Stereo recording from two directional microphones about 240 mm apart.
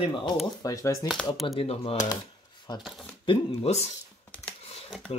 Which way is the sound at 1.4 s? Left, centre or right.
Left.